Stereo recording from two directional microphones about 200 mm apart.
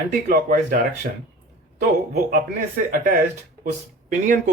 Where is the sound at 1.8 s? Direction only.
40° right (ahead or behind).